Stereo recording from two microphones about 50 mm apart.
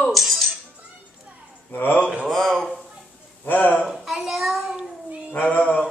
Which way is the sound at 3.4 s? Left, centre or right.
Left.